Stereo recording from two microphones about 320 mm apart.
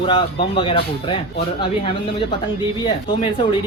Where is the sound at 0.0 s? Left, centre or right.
Centre.